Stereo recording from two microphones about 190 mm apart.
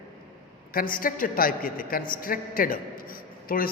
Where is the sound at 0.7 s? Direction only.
50° left (ahead or behind).